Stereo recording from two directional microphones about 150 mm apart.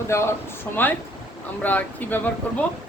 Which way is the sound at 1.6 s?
10° left (ahead or behind).